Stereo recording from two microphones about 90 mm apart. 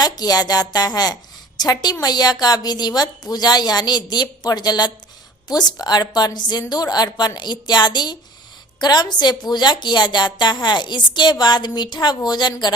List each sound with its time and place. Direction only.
0.0 s a woman's voice: 45° left (ahead or behind)